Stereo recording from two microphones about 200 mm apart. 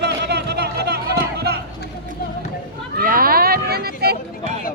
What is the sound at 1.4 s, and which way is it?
Run, 55° right (ahead or behind).